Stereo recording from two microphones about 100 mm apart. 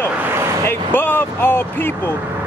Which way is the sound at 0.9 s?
20° left (ahead or behind).